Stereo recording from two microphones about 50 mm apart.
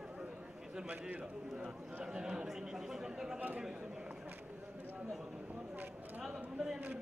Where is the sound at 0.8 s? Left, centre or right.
Right.